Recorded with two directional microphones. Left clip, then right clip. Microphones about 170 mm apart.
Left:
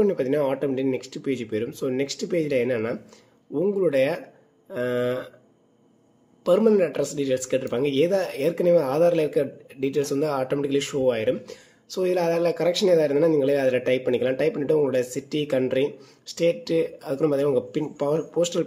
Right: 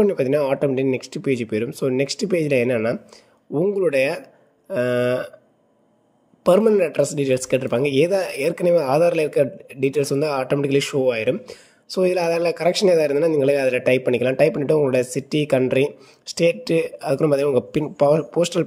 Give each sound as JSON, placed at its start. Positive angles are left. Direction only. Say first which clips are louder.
{"t": 0.0, "sound": "speech", "louder": "right 4 dB", "side_deg": -35}
{"t": 6.4, "sound": "speech", "louder": "right 3 dB", "side_deg": -35}